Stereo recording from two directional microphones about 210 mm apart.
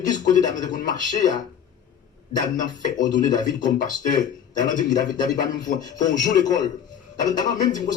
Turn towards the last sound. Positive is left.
turn(degrees=35)  # may be behind; listen again after turning